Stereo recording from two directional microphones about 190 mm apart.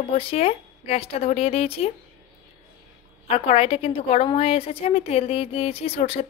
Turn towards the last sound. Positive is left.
turn(degrees=30)  # may be behind; listen again after turning